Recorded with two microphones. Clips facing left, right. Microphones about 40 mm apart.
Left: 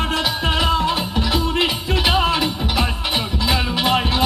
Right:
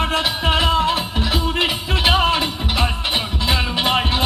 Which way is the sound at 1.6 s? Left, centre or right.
Right.